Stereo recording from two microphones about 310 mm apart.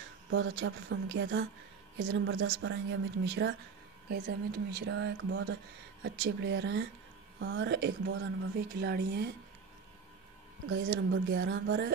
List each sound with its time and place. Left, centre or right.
0.3 s speech: right
10.7 s speech: right